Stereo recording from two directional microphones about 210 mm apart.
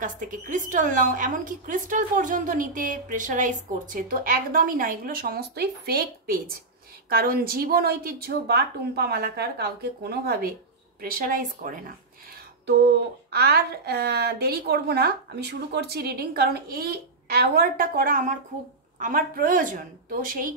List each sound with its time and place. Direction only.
0.0 s a woman's voice: 40° right (ahead or behind)
12.6 s a woman's voice: 50° right (ahead or behind)